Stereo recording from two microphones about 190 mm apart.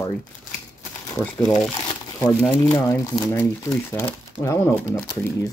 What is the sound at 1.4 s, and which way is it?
Speech, 20° left (ahead or behind).